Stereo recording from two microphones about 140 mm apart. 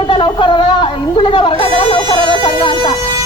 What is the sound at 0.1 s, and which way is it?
Speech, 35° left (ahead or behind).